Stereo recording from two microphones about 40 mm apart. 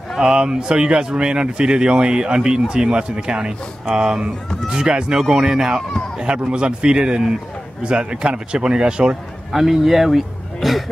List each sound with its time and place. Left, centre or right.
0.2 s speech: right
9.5 s a man's voice: centre